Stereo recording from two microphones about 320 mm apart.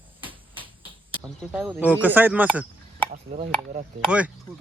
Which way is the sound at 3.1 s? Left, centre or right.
Right.